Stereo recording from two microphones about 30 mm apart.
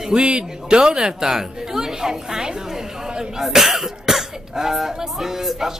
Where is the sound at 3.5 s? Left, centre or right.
Centre.